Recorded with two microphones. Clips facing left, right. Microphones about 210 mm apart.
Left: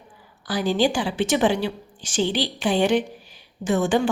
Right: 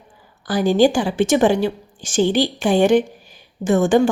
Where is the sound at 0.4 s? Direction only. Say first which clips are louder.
Right 6 dB; 50° right (ahead or behind).